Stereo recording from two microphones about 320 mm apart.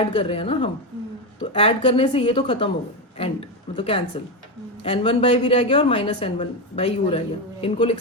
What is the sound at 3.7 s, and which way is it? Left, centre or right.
A woman's voice, centre.